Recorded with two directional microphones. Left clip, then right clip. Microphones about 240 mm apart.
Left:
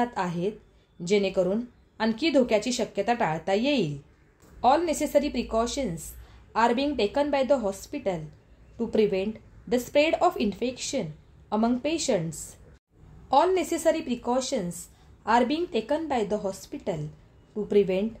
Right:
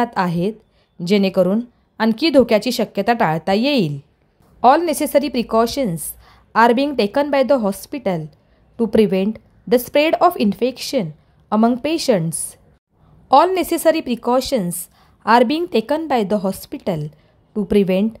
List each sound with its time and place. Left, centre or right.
0.0 s speech: right